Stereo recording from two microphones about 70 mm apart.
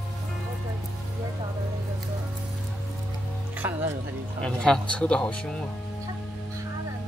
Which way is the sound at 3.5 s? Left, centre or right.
Right.